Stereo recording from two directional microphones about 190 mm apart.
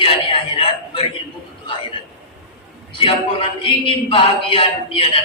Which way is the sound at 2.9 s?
30° left (ahead or behind).